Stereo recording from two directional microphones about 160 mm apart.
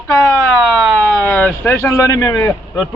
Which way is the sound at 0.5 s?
Centre (ahead or behind).